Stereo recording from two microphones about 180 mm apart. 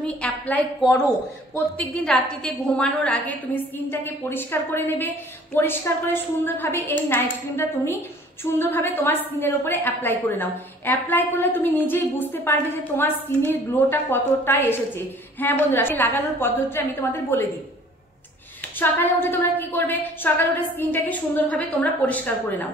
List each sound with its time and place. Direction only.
0.0 s a woman's voice: 10° left (ahead or behind)
0.8 s speech: 20° left (ahead or behind)
1.8 s a woman's voice: 5° left (ahead or behind)
18.8 s a woman's voice: 10° left (ahead or behind)